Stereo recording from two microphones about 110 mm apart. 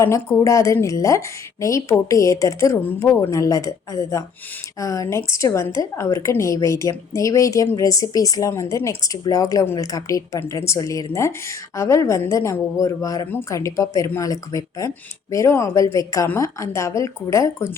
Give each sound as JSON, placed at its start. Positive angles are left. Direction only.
{"t": 0.0, "sound": "a woman's voice", "side_deg": 25}